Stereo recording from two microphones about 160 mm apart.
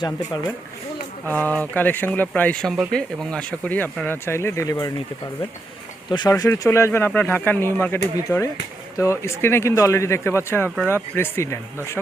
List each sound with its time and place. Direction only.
1.3 s speech: 10° left (ahead or behind)
6.1 s speech: 25° left (ahead or behind)